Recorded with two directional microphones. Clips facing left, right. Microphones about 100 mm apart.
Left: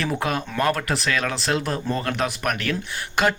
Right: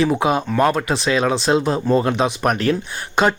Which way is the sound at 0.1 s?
15° right (ahead or behind).